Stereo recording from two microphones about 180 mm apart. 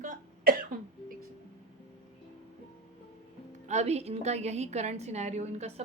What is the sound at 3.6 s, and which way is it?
A woman's voice, 40° right (ahead or behind).